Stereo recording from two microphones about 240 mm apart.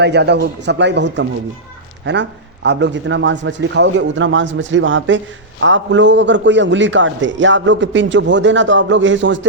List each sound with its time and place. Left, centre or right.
0.0 s a man's voice: right